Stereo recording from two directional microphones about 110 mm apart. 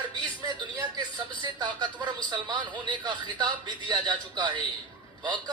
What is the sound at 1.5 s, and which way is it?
A woman's voice, 40° right (ahead or behind).